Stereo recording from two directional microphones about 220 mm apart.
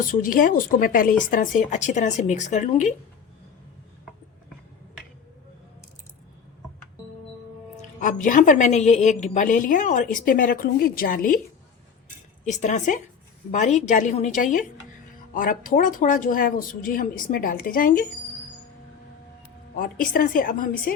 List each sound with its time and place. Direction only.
0.0 s a woman's voice: 40° left (ahead or behind)
7.9 s a woman's voice: 35° left (ahead or behind)
12.5 s a woman's voice: 35° left (ahead or behind)
19.7 s a woman's voice: 40° left (ahead or behind)